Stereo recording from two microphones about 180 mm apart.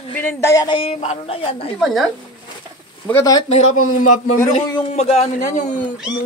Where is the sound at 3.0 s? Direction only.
10° left (ahead or behind).